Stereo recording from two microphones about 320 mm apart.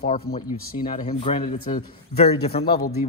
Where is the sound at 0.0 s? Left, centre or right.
Centre.